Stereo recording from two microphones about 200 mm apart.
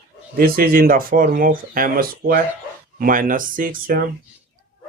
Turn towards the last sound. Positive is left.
turn(degrees=-45)  # may be behind; listen again after turning